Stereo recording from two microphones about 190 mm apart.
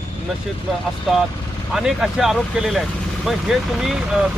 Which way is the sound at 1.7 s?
Centre (ahead or behind).